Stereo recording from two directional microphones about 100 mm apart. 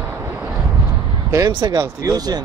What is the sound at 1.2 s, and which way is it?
Speech, 35° right (ahead or behind).